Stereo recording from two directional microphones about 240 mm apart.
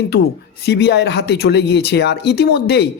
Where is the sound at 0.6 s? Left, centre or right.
Left.